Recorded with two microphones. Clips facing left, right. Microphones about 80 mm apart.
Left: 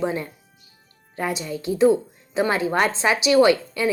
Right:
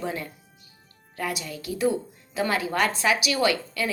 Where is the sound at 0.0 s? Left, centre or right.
Left.